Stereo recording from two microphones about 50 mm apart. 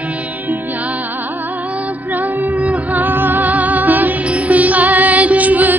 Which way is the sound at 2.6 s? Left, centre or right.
Right.